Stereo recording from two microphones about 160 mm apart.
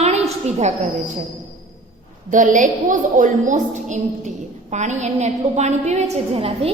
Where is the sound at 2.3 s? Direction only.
55° right (ahead or behind); by 6.8 s 35° right (ahead or behind).